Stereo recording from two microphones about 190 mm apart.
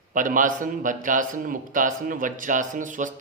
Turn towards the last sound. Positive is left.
turn(degrees=-40)  # may be behind; listen again after turning